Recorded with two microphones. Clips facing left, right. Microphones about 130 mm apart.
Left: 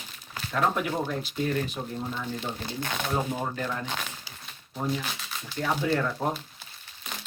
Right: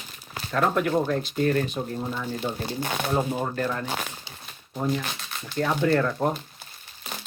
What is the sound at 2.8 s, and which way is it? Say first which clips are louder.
Speech: right 3 dB; 15° right (ahead or behind).